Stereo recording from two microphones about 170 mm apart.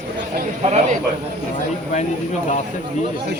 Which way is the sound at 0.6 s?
40° right (ahead or behind).